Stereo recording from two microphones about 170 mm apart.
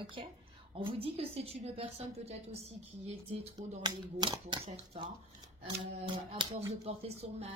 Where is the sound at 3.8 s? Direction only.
25° right (ahead or behind).